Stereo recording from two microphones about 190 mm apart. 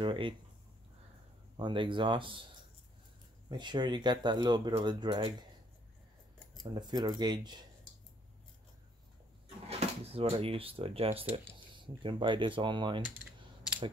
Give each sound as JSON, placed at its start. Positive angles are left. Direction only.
{"t": 0.0, "sound": "speech", "side_deg": -25}
{"t": 1.6, "sound": "speech", "side_deg": -25}
{"t": 3.4, "sound": "speech", "side_deg": -20}
{"t": 6.6, "sound": "speech", "side_deg": -20}
{"t": 9.7, "sound": "speech", "side_deg": -30}